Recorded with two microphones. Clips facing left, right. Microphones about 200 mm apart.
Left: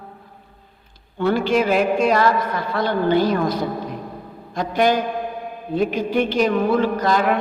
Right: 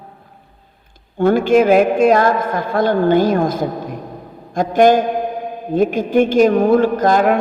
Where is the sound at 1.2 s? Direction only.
50° right (ahead or behind).